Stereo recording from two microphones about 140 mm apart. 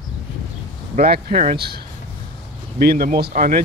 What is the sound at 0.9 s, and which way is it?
Speech, 90° right.